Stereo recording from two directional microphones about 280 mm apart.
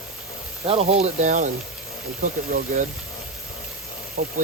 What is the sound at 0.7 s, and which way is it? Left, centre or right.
Speech, right.